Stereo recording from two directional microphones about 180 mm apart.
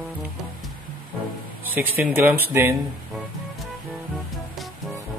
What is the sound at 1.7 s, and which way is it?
A man's voice, 10° right (ahead or behind).